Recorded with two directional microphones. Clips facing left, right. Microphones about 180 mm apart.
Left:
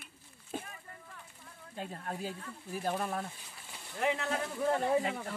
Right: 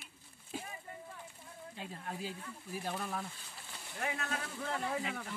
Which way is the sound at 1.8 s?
45° left (ahead or behind).